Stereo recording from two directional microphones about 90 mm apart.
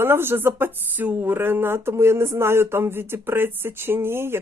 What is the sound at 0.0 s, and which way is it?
Speech, 25° right (ahead or behind).